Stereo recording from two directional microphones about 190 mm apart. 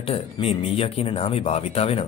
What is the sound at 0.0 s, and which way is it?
Speech, 30° left (ahead or behind).